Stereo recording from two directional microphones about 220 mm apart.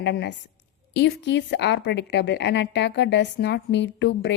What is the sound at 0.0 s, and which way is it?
A woman's voice, 50° left (ahead or behind).